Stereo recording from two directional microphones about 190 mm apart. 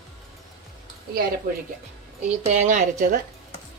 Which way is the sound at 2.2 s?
40° right (ahead or behind).